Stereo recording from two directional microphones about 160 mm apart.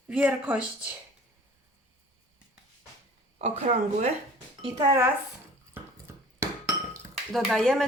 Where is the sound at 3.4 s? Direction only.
45° right (ahead or behind).